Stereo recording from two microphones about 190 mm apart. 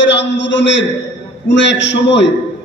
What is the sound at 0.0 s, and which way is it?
A man's voice, 70° left (ahead or behind).